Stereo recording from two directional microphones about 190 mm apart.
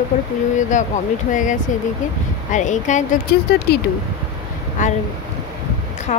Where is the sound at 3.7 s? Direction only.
60° left (ahead or behind).